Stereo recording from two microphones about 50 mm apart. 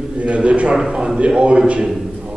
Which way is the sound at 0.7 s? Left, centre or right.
Centre.